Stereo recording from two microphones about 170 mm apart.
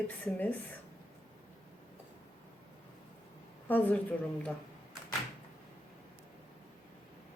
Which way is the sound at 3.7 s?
10° left (ahead or behind).